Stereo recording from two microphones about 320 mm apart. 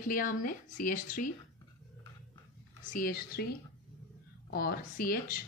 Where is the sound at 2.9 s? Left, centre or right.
Left.